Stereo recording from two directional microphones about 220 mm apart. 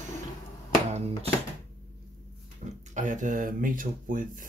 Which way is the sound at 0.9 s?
30° right (ahead or behind).